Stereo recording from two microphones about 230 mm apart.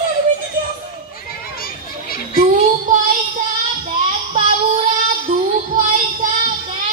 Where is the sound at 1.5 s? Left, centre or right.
Left.